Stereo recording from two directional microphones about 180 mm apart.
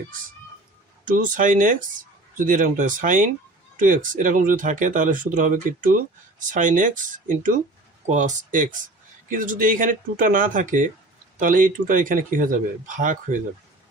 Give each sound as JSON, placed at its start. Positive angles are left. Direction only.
{"t": 1.0, "sound": "speech", "side_deg": -50}